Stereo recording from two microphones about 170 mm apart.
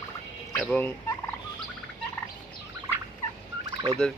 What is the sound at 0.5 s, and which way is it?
Fowl, 5° left (ahead or behind).